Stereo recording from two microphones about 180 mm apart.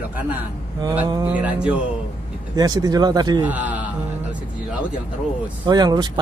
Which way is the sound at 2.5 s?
20° right (ahead or behind).